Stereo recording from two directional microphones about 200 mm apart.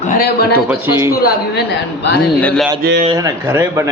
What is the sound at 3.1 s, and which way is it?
Speech, 20° right (ahead or behind).